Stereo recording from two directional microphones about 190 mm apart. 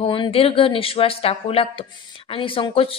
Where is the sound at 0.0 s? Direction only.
30° left (ahead or behind).